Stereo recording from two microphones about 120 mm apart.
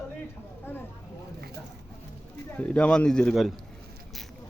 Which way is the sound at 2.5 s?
10° left (ahead or behind).